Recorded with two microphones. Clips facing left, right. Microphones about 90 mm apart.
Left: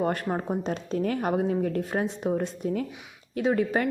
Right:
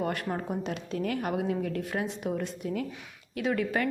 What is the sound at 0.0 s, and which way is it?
A woman's voice, 30° left (ahead or behind).